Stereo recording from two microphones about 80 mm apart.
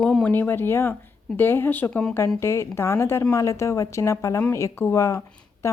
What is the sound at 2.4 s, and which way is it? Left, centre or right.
A woman's voice, left.